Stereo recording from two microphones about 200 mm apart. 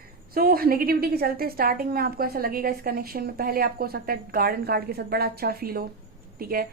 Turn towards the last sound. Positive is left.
turn(degrees=-45)  # may be behind; listen again after turning